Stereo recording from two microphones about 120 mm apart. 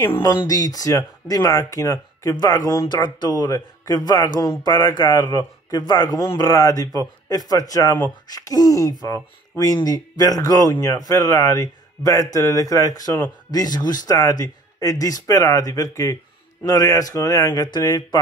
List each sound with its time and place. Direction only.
0.3 s speech: 35° left (ahead or behind)